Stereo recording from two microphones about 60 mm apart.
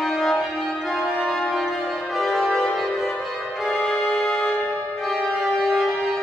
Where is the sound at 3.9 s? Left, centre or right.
Centre.